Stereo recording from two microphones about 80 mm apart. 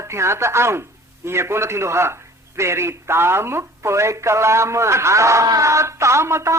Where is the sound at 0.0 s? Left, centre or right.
Right.